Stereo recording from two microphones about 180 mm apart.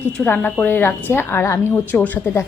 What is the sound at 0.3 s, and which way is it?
A woman's voice, 10° left (ahead or behind).